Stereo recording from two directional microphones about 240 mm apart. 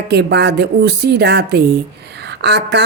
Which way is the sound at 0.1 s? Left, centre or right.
Right.